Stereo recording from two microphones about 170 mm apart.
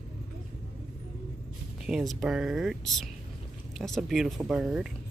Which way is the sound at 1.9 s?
Centre (ahead or behind).